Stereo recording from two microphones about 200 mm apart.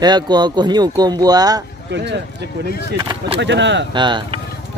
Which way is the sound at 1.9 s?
60° right (ahead or behind).